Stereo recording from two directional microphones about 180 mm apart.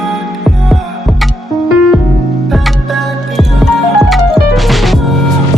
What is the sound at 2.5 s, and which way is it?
Music, centre (ahead or behind).